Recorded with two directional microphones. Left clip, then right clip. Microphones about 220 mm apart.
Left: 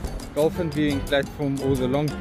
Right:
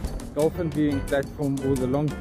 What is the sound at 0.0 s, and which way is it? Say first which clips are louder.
Speech: left 2 dB; centre (ahead or behind).